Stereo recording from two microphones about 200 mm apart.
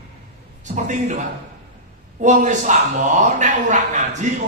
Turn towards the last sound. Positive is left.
turn(degrees=-35)  # may be behind; listen again after turning